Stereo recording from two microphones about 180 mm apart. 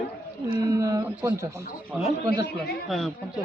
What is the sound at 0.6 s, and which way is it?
Speech, 20° right (ahead or behind).